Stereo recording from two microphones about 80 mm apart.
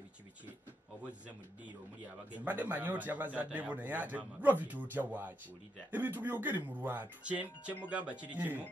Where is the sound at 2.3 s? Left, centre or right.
Right.